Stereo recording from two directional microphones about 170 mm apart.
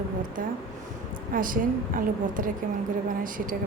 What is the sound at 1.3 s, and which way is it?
A woman's voice, 55° right (ahead or behind).